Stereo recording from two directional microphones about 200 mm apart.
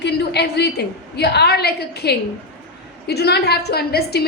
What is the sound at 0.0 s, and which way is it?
A woman's voice, 55° left (ahead or behind).